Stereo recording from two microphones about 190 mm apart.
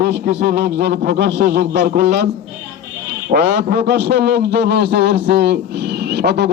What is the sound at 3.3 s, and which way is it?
A man's voice, 60° right (ahead or behind).